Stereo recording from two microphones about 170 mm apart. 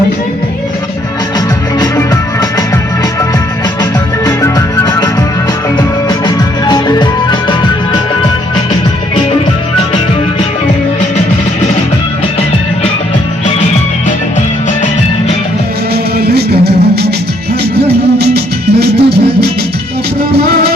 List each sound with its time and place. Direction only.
1.8 s music: 20° left (ahead or behind)
4.3 s music: 20° left (ahead or behind)
16.1 s music: 70° right (ahead or behind)